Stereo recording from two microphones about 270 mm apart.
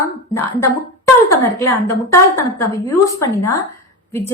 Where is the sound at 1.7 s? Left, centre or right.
Centre.